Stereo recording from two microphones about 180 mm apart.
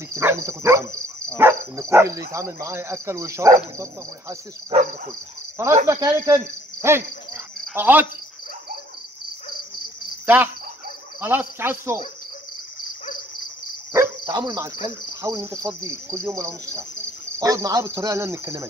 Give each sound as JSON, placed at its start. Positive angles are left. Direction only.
{"t": 0.1, "sound": "speech", "side_deg": -15}
{"t": 5.9, "sound": "cricket", "side_deg": -20}
{"t": 7.7, "sound": "speech", "side_deg": -10}
{"t": 10.2, "sound": "cricket", "side_deg": -10}
{"t": 11.1, "sound": "speech", "side_deg": -10}
{"t": 13.9, "sound": "speech", "side_deg": -20}